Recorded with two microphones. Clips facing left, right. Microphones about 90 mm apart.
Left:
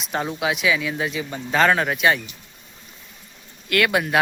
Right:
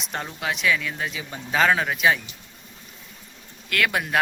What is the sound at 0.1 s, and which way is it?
Speech, 10° left (ahead or behind).